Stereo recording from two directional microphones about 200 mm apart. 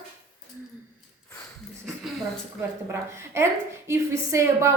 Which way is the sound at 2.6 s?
10° right (ahead or behind).